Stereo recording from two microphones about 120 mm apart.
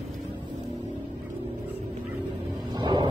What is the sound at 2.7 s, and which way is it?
Music, 40° right (ahead or behind).